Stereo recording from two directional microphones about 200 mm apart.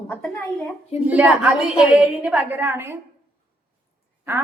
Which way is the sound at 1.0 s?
5° right (ahead or behind).